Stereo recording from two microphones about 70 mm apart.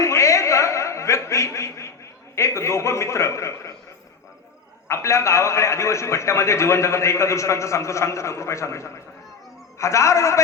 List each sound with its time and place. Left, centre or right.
0.0 s a sound: left
2.3 s a man's voice: left
4.9 s a man's voice: left